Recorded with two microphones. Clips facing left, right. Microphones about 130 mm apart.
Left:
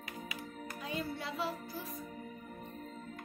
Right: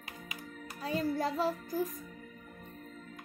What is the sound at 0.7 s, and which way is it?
A child's voice, 35° right (ahead or behind).